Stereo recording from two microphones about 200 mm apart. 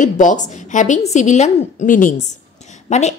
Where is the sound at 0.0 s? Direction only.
40° left (ahead or behind).